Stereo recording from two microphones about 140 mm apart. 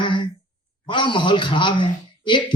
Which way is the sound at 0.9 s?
35° left (ahead or behind).